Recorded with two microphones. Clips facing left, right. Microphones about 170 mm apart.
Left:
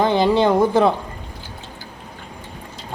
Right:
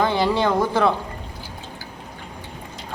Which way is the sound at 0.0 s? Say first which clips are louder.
Left 4 dB; 20° left (ahead or behind).